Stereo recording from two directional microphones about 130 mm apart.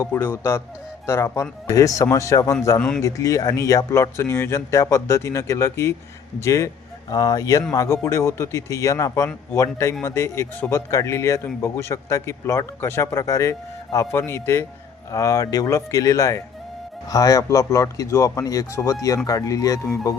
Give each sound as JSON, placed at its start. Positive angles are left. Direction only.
{"t": 0.0, "sound": "speech", "side_deg": 15}